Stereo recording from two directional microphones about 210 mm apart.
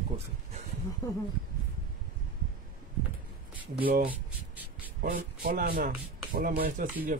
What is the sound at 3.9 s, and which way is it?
Speech, 45° right (ahead or behind).